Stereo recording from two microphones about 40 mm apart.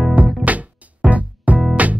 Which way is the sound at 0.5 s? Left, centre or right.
Right.